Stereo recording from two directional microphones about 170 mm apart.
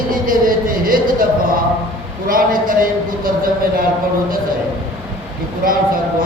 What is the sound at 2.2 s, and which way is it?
Speech, 55° right (ahead or behind).